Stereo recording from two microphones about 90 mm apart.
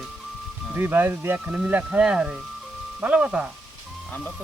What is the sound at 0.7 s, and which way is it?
Speech, 25° right (ahead or behind).